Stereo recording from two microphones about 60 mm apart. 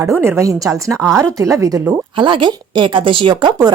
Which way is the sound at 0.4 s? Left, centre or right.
Right.